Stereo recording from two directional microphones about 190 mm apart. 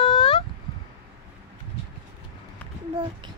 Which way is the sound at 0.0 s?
30° left (ahead or behind).